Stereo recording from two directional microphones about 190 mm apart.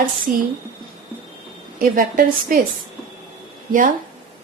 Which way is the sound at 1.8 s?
45° right (ahead or behind).